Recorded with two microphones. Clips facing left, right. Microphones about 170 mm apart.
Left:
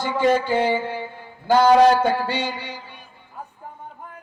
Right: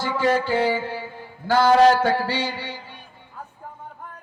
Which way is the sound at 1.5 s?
15° left (ahead or behind).